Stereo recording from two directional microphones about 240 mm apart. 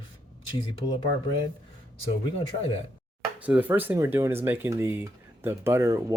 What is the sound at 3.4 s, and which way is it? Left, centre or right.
Speech, centre.